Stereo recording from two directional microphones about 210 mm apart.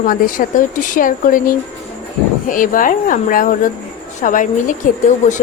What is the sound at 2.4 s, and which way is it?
Speech, 40° left (ahead or behind).